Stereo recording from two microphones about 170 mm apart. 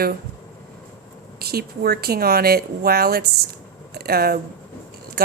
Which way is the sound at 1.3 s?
65° right (ahead or behind).